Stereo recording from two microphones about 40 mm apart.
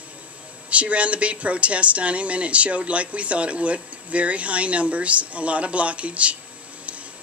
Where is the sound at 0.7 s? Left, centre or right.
Right.